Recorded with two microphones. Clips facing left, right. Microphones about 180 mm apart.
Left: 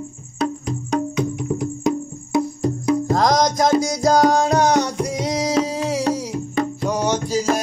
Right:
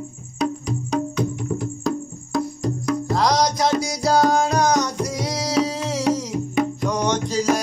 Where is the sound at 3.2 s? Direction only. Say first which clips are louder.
Right 1 dB; 45° left (ahead or behind).